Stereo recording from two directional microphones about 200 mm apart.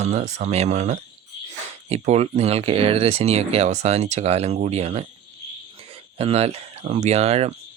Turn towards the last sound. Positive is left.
turn(degrees=-30)  # may be behind; listen again after turning